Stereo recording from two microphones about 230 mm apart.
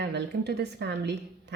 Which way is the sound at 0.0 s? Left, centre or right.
Right.